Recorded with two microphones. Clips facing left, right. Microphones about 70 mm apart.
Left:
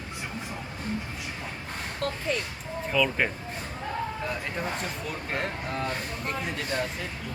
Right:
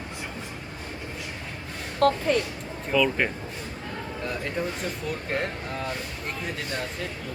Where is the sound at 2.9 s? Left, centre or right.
Centre.